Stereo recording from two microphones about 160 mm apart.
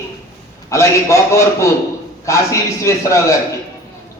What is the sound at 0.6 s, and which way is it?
A man's voice, 20° left (ahead or behind).